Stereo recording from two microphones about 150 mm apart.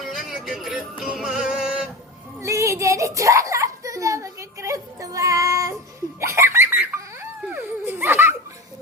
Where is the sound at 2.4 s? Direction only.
20° right (ahead or behind).